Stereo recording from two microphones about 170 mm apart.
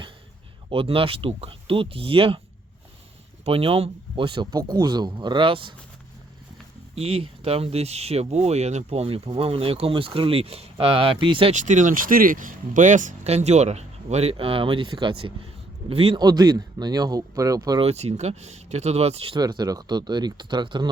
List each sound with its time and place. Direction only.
0.7 s speech: 35° right (ahead or behind)
3.4 s speech: 35° right (ahead or behind)
6.9 s speech: 35° right (ahead or behind)
11.5 s speech: 45° right (ahead or behind); by 17.8 s 20° right (ahead or behind)
17.8 s speech: 40° right (ahead or behind)
19.4 s speech: 25° right (ahead or behind)